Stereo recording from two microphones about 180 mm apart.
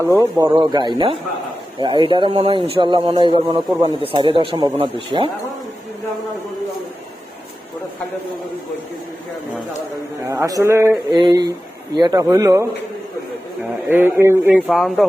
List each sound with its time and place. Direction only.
0.0 s a man's voice: 15° right (ahead or behind)
10.2 s a man's voice: 15° right (ahead or behind)
13.8 s speech: 10° right (ahead or behind)
14.7 s speech: centre (ahead or behind)